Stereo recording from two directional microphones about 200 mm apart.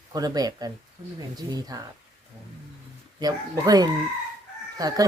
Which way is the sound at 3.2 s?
20° right (ahead or behind).